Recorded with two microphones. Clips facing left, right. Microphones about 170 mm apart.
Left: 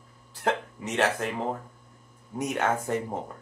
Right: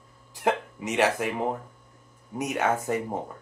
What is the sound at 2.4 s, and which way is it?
Speech, 5° right (ahead or behind).